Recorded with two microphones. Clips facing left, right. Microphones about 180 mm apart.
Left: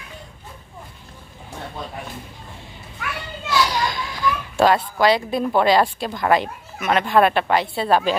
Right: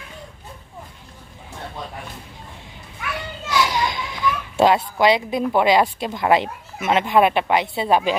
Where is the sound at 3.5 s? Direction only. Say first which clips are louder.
Even; 20° right (ahead or behind).